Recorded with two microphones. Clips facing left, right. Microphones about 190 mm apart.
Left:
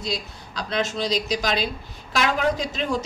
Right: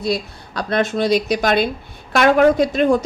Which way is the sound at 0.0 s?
60° right (ahead or behind).